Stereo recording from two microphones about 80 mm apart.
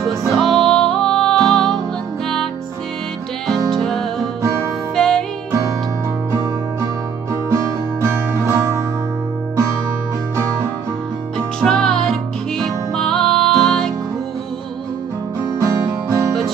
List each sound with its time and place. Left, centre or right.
0.3 s music: centre
3.4 s music: centre
7.4 s music: right
11.6 s music: centre
15.6 s music: right